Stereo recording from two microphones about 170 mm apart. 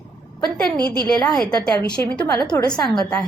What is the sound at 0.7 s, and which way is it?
Speech, 25° right (ahead or behind).